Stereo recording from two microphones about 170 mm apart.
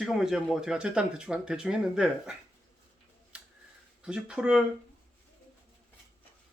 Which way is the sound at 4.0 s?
5° right (ahead or behind).